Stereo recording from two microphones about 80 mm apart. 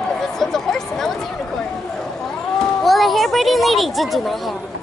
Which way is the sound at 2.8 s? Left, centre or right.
Centre.